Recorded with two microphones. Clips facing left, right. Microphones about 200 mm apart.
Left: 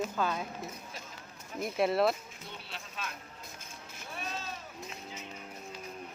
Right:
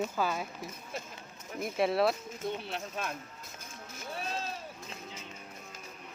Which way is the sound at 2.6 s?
55° right (ahead or behind).